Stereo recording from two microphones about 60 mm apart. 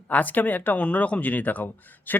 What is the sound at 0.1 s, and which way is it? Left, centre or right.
Speech, left.